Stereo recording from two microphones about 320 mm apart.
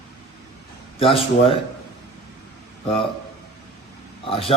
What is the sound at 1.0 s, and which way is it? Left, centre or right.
Speech, centre.